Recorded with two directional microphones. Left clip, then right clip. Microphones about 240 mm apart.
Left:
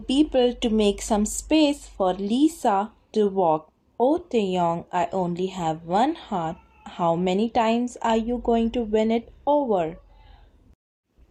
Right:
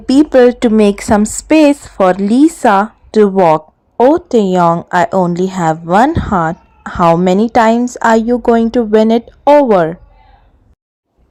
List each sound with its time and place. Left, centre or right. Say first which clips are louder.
0.0 s a woman's voice: right 13 dB; right